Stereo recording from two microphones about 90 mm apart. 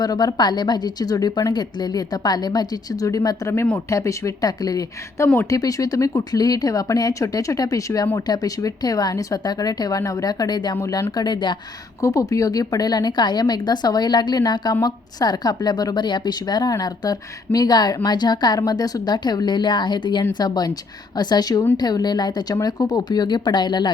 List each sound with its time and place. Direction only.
0.0 s a woman's voice: 45° left (ahead or behind); by 5.5 s 30° left (ahead or behind)
5.5 s a woman's voice: 40° left (ahead or behind)
10.8 s speech: 35° left (ahead or behind)
11.1 s speech: 55° left (ahead or behind)
11.9 s a woman's voice: 40° left (ahead or behind); by 23.9 s 55° left (ahead or behind)